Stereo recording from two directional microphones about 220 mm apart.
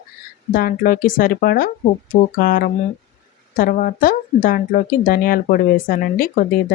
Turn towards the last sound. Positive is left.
turn(degrees=40)  # may be behind; listen again after turning